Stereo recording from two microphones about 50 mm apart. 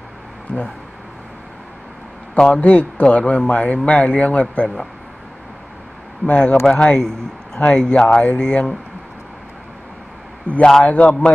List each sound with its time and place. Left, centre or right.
2.3 s a man's voice: centre
6.2 s a man's voice: left
10.5 s a man's voice: left